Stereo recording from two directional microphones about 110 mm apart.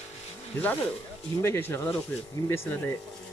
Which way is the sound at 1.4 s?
20° left (ahead or behind).